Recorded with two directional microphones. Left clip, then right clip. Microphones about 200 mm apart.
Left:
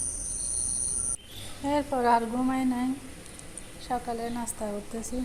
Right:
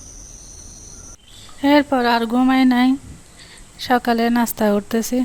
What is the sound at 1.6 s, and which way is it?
Speech, 50° right (ahead or behind).